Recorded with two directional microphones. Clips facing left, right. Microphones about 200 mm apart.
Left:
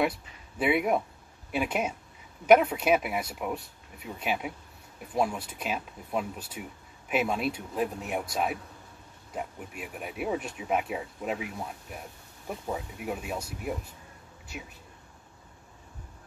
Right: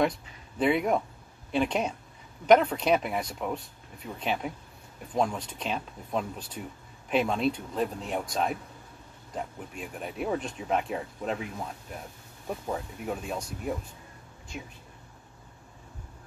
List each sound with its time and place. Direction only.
0.6 s speech: 10° left (ahead or behind)
12.7 s speech: 5° left (ahead or behind)